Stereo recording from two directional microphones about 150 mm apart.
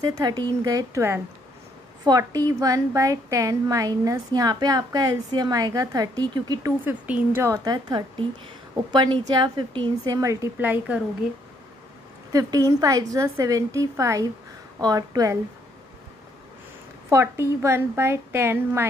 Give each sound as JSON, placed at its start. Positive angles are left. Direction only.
{"t": 0.0, "sound": "a woman's voice", "side_deg": -25}
{"t": 6.8, "sound": "a woman's voice", "side_deg": -10}
{"t": 12.3, "sound": "a woman's voice", "side_deg": -25}
{"t": 17.1, "sound": "a woman's voice", "side_deg": -15}